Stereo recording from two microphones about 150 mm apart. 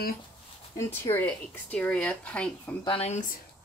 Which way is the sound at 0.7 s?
15° left (ahead or behind).